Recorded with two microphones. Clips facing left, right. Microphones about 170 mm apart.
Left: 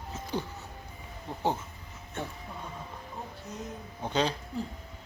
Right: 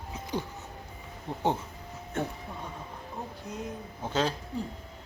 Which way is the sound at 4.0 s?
5° right (ahead or behind).